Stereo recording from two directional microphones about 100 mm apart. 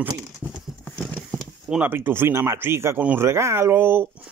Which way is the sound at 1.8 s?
20° right (ahead or behind).